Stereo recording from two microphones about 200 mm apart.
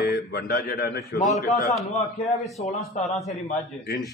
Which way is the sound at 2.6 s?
35° left (ahead or behind).